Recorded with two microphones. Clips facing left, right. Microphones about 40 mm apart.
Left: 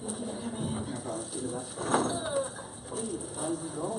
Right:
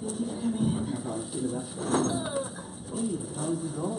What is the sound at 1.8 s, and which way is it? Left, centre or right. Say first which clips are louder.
Speech: right 1 dB; centre.